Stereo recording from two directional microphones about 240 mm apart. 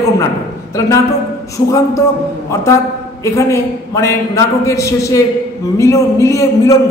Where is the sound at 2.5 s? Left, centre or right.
Centre.